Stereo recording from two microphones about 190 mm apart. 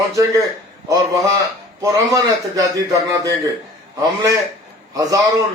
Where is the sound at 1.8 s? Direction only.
20° right (ahead or behind).